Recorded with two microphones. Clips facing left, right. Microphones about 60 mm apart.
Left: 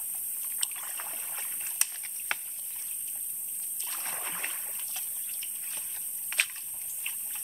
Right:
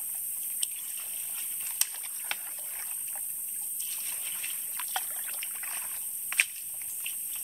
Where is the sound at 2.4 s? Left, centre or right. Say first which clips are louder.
Right 6 dB; right.